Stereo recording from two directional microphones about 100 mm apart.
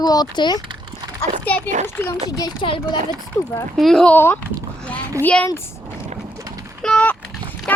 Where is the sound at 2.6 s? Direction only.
60° left (ahead or behind).